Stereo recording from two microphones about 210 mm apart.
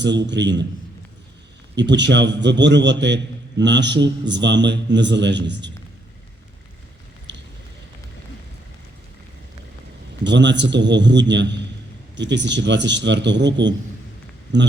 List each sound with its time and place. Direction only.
0.0 s a man's voice: 55° right (ahead or behind)
1.7 s a man's voice: 55° right (ahead or behind)
10.2 s a man's voice: 55° right (ahead or behind)